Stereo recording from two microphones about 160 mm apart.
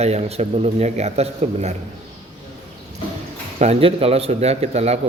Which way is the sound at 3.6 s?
40° right (ahead or behind).